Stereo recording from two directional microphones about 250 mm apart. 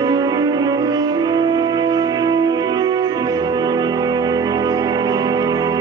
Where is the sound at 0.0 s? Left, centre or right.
Centre.